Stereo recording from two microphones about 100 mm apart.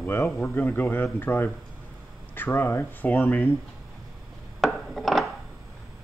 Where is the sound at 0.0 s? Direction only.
20° left (ahead or behind).